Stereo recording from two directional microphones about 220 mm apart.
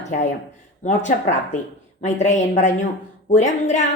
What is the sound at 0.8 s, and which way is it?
A woman's voice, 30° left (ahead or behind).